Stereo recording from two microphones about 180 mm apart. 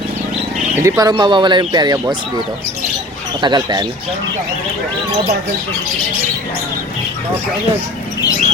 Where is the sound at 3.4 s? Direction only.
25° right (ahead or behind).